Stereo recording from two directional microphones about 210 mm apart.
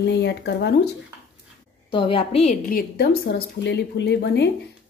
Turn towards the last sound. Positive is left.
turn(degrees=55)  # may be behind; listen again after turning